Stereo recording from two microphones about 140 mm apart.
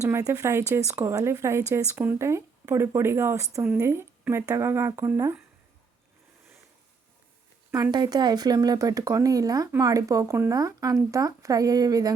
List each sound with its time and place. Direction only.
0.0 s speech: 25° right (ahead or behind)
7.7 s speech: 30° right (ahead or behind)